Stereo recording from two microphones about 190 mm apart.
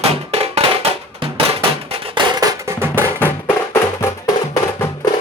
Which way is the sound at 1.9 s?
25° right (ahead or behind).